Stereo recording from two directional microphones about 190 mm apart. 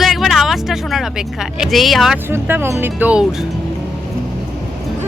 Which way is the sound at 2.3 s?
10° right (ahead or behind).